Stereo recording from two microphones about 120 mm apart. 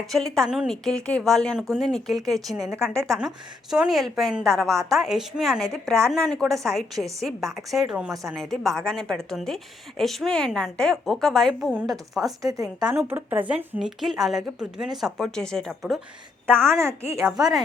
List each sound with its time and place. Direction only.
0.1 s a woman's voice: 5° left (ahead or behind)
2.6 s speech: 20° right (ahead or behind)
2.9 s a woman's voice: 5° left (ahead or behind)
12.2 s speech: 30° right (ahead or behind)
12.8 s speech: 15° right (ahead or behind)
13.7 s a woman's voice: centre (ahead or behind)
16.6 s speech: 25° right (ahead or behind)